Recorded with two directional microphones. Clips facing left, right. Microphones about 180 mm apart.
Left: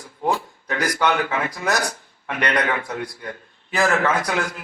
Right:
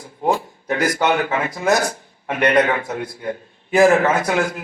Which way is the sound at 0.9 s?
20° right (ahead or behind).